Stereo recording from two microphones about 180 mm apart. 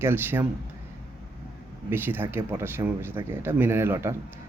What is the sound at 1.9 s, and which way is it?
Speech, 10° right (ahead or behind).